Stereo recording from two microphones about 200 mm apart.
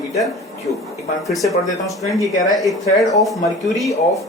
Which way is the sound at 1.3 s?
Centre (ahead or behind).